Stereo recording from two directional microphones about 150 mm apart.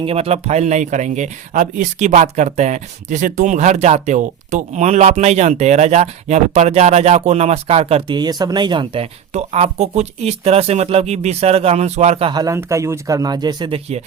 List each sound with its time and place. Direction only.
0.0 s speech: 40° right (ahead or behind)
12.3 s speech: 25° right (ahead or behind)